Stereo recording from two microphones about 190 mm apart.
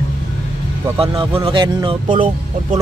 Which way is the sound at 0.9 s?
30° right (ahead or behind).